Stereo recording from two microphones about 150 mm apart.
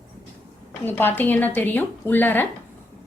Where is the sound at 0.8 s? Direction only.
15° left (ahead or behind).